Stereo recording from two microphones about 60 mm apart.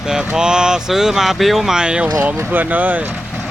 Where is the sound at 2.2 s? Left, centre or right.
Right.